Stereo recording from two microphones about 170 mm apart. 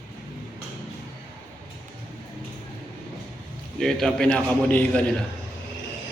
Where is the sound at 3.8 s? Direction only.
Centre (ahead or behind).